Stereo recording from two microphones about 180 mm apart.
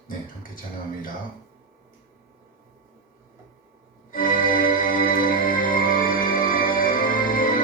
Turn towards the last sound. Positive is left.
turn(degrees=50)  # may be behind; listen again after turning